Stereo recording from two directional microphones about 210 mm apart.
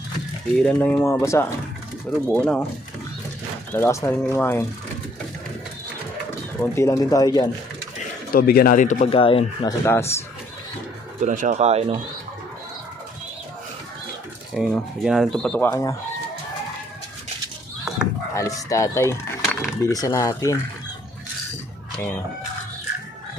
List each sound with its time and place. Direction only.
0.5 s speech: 5° left (ahead or behind)
3.7 s speech: 10° left (ahead or behind)
6.6 s speech: 15° left (ahead or behind)
8.3 s speech: 45° left (ahead or behind)
9.0 s speech: 25° left (ahead or behind)
9.8 s speech: 10° left (ahead or behind)
11.2 s speech: 35° right (ahead or behind)
14.5 s speech: centre (ahead or behind); by 16.0 s 15° left (ahead or behind)
18.3 s speech: 15° left (ahead or behind)
21.9 s speech: 10° left (ahead or behind)